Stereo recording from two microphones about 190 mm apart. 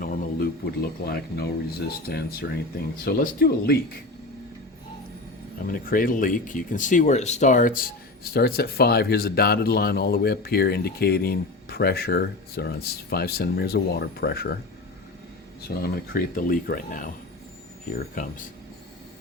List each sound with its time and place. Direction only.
0.0 s speech: 50° left (ahead or behind)
5.7 s speech: 50° left (ahead or behind)
15.7 s speech: 50° left (ahead or behind)
18.1 s speech: 45° left (ahead or behind)